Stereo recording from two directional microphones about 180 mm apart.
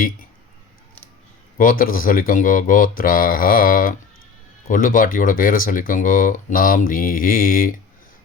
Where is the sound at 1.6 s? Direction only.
50° left (ahead or behind).